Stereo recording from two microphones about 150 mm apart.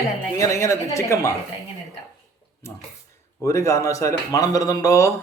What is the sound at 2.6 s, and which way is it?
A man's voice, 20° left (ahead or behind).